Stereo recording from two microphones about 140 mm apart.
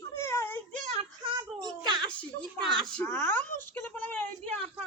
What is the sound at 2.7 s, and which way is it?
Speech, centre (ahead or behind).